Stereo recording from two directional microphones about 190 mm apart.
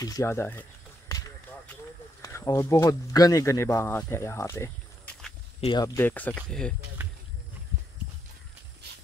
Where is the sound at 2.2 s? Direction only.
20° left (ahead or behind).